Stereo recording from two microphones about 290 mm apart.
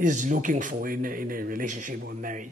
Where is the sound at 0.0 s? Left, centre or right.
Right.